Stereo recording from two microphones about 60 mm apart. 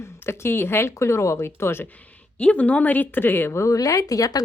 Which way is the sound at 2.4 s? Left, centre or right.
Left.